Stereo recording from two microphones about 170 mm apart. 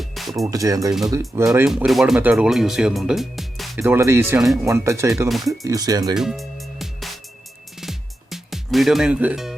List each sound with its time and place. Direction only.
0.0 s music: centre (ahead or behind)
0.5 s speech: 20° right (ahead or behind)
1.5 s speech: 5° right (ahead or behind)
3.8 s speech: 15° right (ahead or behind)
6.1 s music: centre (ahead or behind)